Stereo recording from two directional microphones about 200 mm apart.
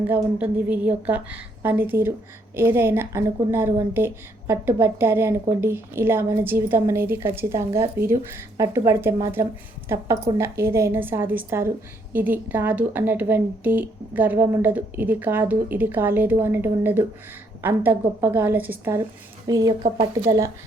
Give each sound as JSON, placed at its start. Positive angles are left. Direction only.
{"t": 0.1, "sound": "a woman's voice", "side_deg": -10}